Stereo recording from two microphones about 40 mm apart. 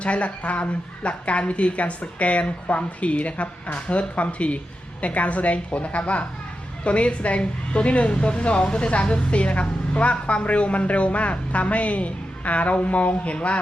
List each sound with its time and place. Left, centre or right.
0.0 s a woman's voice: left